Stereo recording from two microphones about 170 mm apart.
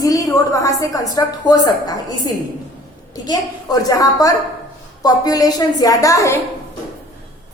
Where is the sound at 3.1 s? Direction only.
20° left (ahead or behind).